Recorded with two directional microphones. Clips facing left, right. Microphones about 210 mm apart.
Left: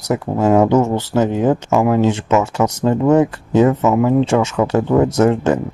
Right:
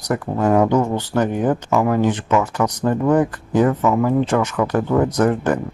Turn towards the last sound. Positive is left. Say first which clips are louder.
# left 3 dB
turn(degrees=25)  # may be behind; listen again after turning